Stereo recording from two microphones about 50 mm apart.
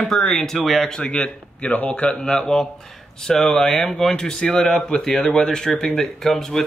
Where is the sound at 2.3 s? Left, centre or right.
Centre.